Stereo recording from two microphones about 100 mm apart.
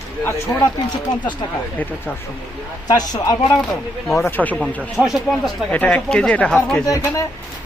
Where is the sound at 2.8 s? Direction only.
40° left (ahead or behind).